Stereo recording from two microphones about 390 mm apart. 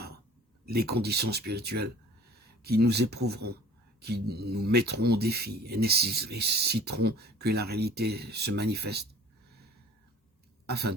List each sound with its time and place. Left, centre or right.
0.6 s speech: right
10.7 s speech: right